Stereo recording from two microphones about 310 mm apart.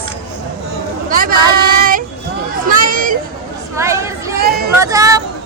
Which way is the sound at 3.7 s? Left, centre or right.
Centre.